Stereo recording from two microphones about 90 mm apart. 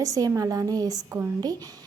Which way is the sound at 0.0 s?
40° right (ahead or behind).